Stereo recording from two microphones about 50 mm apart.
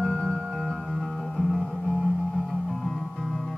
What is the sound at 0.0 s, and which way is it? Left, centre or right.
Music, centre.